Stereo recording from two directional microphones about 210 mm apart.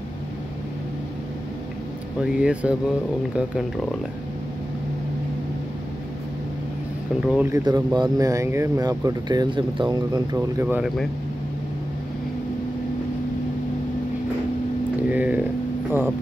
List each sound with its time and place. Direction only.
2.2 s speech: 5° right (ahead or behind)
7.2 s speech: 5° right (ahead or behind)
15.0 s a sound: 5° right (ahead or behind)